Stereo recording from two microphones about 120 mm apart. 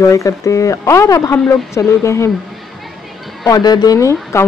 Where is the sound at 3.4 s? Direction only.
30° left (ahead or behind).